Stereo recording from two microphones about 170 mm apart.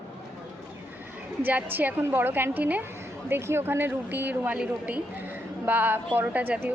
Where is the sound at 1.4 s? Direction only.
10° right (ahead or behind).